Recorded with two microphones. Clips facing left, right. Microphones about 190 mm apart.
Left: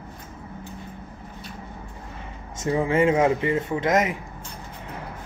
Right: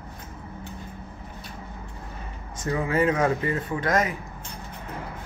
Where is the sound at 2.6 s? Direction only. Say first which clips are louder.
Left 3 dB; 25° left (ahead or behind).